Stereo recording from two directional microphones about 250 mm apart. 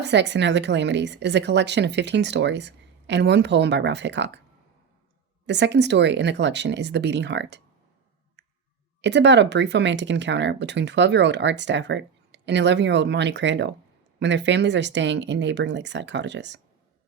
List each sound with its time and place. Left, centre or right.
0.0 s speech: right
5.5 s speech: right
9.0 s speech: right